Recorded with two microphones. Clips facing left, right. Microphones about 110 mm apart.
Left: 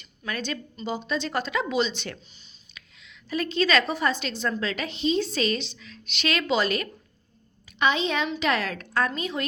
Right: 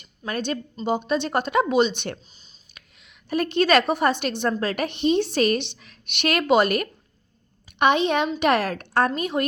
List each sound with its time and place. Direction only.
0.0 s a woman's voice: 40° right (ahead or behind)